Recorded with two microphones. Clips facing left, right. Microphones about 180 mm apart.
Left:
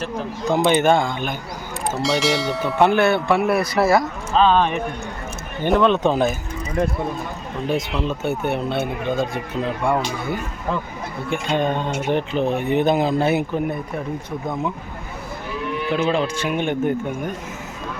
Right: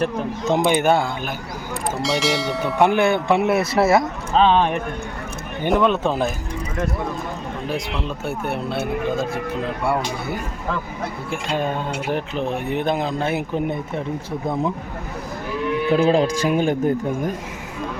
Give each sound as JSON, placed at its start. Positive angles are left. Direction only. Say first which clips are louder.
{"t": 0.4, "sound": "speech", "louder": "left 1 dB", "side_deg": -15}
{"t": 2.7, "sound": "speech", "louder": "left 1 dB", "side_deg": -15}
{"t": 5.6, "sound": "speech", "louder": "left 2 dB", "side_deg": -15}
{"t": 7.7, "sound": "speech", "louder": "left 5 dB", "side_deg": 0}
{"t": 13.5, "sound": "speech", "louder": "even", "side_deg": -20}
{"t": 15.9, "sound": "speech", "louder": "right 4 dB", "side_deg": -35}